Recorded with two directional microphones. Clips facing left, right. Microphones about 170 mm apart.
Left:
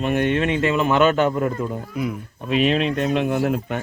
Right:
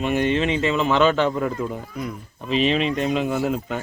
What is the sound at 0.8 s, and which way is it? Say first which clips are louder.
Speech: left 1 dB; 5° left (ahead or behind).